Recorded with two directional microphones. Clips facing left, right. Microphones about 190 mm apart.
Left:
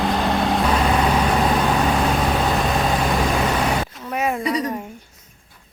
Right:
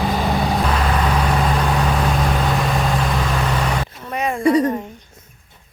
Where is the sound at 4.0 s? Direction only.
5° left (ahead or behind).